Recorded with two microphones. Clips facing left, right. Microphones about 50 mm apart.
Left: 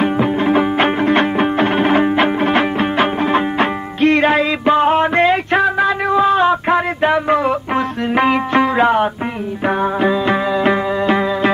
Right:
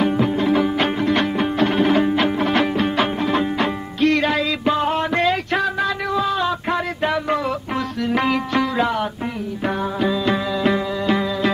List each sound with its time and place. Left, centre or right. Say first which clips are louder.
0.0 s music: left 3 dB; left
10.0 s music: left 3 dB; left